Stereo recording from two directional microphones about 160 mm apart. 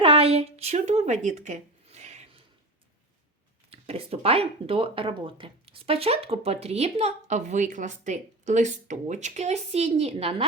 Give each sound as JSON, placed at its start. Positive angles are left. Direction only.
{"t": 0.0, "sound": "speech", "side_deg": -35}
{"t": 3.7, "sound": "speech", "side_deg": -35}